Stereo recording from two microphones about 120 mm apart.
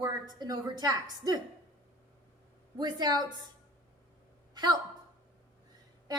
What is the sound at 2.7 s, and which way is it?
Speech, 35° right (ahead or behind).